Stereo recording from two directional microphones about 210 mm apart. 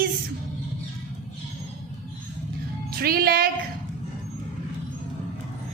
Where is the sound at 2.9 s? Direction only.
45° right (ahead or behind).